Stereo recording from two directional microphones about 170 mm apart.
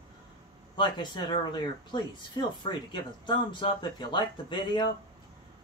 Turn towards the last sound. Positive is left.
turn(degrees=25)  # may be behind; listen again after turning